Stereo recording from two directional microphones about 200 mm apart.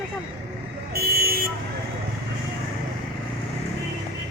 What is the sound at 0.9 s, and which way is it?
Vehicle, 50° right (ahead or behind).